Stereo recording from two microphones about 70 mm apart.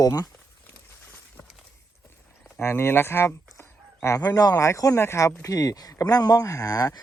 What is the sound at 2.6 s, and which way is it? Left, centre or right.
Speech, left.